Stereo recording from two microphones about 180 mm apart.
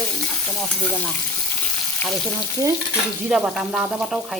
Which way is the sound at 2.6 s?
20° right (ahead or behind).